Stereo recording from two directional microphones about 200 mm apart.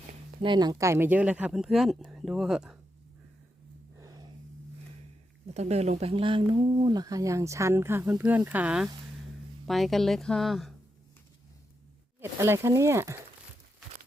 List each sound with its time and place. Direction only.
0.4 s speech: 20° right (ahead or behind); by 2.7 s 5° right (ahead or behind)
4.0 s a sound: 20° right (ahead or behind)
5.5 s speech: 35° right (ahead or behind); by 10.8 s centre (ahead or behind)
12.2 s speech: 15° right (ahead or behind)